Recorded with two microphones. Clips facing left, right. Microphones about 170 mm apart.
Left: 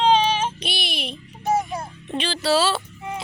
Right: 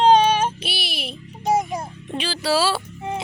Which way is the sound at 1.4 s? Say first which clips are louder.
Right 2 dB; 15° right (ahead or behind).